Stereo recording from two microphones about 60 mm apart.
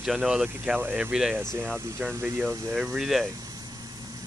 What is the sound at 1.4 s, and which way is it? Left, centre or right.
Speech, right.